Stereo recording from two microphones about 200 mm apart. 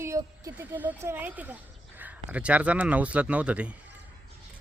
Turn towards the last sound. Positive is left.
turn(degrees=-5)  # may be behind; listen again after turning